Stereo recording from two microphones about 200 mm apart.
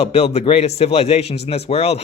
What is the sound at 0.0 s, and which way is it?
Speech, 30° left (ahead or behind).